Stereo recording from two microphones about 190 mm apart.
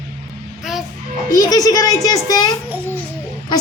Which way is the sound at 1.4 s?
20° left (ahead or behind).